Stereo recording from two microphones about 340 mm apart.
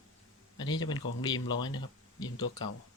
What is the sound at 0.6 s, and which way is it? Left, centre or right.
Speech, centre.